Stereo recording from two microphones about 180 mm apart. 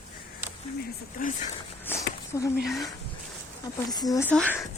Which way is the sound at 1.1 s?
45° left (ahead or behind).